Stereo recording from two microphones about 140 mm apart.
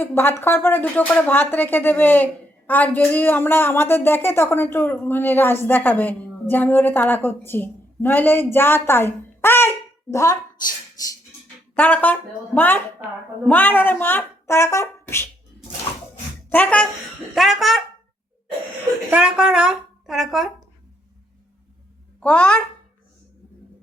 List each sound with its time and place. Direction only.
0.0 s speech: 15° left (ahead or behind)
11.8 s speech: 10° left (ahead or behind)
13.0 s speech: 15° right (ahead or behind)
13.4 s speech: 10° left (ahead or behind)
16.5 s speech: 10° left (ahead or behind)
17.3 s speech: centre (ahead or behind)
19.1 s speech: 5° right (ahead or behind)
22.2 s speech: 10° left (ahead or behind)